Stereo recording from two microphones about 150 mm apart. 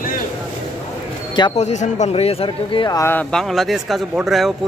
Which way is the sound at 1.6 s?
50° left (ahead or behind).